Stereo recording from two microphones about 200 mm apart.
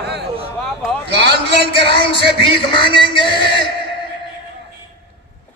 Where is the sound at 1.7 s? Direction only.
25° left (ahead or behind).